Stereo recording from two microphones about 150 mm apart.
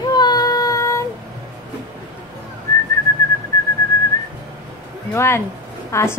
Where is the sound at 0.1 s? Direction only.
25° left (ahead or behind).